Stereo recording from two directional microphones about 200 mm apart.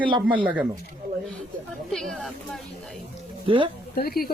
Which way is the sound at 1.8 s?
Centre (ahead or behind).